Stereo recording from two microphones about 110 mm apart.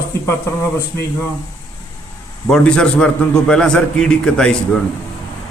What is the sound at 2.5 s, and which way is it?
A man's voice, 10° left (ahead or behind).